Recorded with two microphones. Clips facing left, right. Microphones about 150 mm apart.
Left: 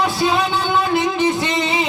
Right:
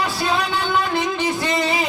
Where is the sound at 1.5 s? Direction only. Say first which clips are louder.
Left 1 dB; 20° left (ahead or behind).